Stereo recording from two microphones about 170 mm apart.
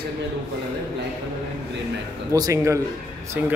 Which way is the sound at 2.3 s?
20° right (ahead or behind).